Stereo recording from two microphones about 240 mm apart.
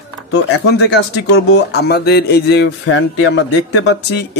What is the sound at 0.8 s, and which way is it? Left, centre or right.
Speech, left.